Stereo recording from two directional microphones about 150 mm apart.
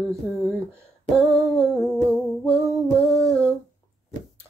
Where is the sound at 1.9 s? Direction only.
10° left (ahead or behind).